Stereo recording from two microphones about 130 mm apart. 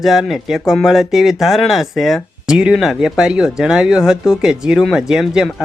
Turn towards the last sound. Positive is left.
turn(degrees=-5)  # may be behind; listen again after turning